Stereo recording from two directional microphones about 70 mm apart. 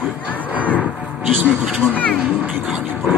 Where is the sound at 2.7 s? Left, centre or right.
Centre.